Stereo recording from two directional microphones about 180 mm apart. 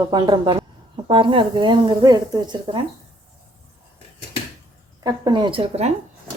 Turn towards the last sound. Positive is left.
turn(degrees=-30)  # may be behind; listen again after turning